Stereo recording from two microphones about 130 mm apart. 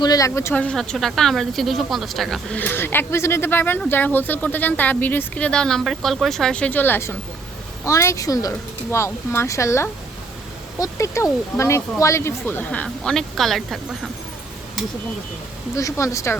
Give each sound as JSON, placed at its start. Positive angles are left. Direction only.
{"t": 0.0, "sound": "speech", "side_deg": 25}
{"t": 0.6, "sound": "speech", "side_deg": 5}
{"t": 2.6, "sound": "speech", "side_deg": 15}
{"t": 15.7, "sound": "speech", "side_deg": 25}